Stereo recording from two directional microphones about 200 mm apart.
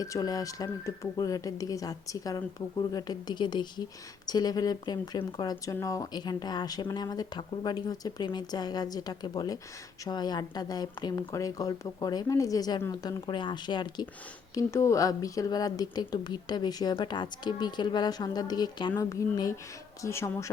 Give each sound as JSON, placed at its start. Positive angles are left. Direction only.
{"t": 0.0, "sound": "speech", "side_deg": 20}